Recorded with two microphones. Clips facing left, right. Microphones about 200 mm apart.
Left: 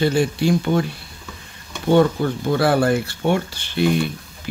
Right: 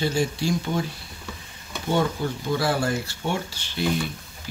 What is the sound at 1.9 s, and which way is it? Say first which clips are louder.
Speech: left 8 dB; 60° left (ahead or behind).